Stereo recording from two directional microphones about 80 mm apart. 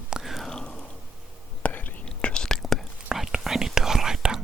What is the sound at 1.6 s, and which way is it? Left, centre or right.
Whispering, left.